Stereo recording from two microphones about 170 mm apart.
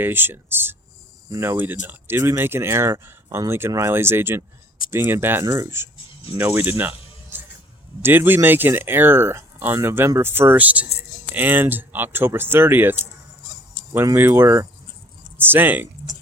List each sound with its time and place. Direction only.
0.0 s speech: 10° right (ahead or behind)